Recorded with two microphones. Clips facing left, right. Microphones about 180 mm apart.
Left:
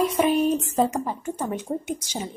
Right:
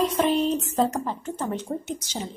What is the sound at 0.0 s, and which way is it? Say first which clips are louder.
A woman's voice: left 1 dB; 10° left (ahead or behind).